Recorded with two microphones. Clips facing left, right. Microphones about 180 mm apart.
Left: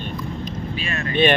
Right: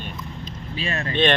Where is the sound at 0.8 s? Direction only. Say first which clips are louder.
Right 3 dB; 30° right (ahead or behind).